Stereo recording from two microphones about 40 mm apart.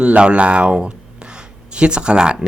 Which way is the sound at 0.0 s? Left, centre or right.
Right.